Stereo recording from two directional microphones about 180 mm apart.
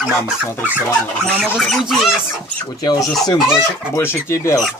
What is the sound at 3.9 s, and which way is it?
Speech, 15° left (ahead or behind).